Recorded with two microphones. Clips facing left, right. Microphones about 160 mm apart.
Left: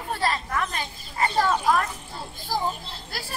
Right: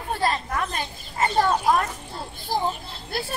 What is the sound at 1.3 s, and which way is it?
Speech, 45° right (ahead or behind).